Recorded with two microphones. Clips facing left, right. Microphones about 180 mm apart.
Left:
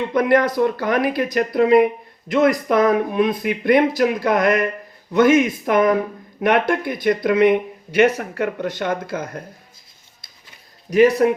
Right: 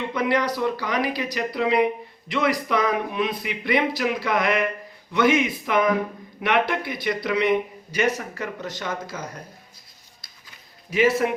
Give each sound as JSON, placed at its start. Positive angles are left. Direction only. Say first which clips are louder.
{"t": 0.1, "sound": "speech", "louder": "left 7 dB", "side_deg": 50}
{"t": 10.9, "sound": "speech", "louder": "left 8 dB", "side_deg": 40}